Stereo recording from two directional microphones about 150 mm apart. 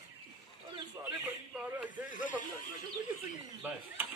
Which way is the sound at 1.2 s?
10° right (ahead or behind).